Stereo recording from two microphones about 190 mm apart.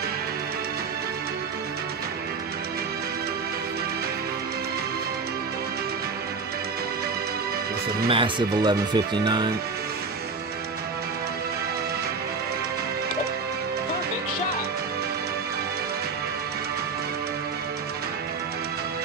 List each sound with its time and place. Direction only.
8.1 s speech: 25° right (ahead or behind)